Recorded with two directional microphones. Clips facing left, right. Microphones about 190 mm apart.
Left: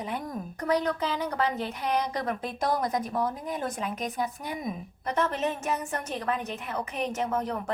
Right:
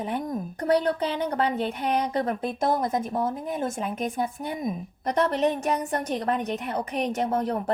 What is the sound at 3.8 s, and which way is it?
Speech, 50° right (ahead or behind).